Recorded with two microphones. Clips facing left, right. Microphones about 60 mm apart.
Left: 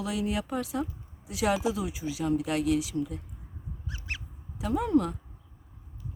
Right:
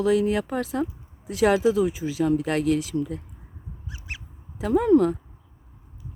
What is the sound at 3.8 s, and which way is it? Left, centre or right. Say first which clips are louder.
Honk: even; centre.